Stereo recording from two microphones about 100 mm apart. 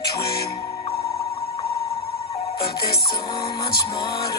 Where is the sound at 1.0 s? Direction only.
30° left (ahead or behind).